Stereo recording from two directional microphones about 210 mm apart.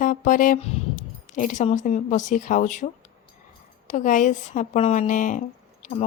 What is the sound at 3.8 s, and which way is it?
Speech, 35° left (ahead or behind).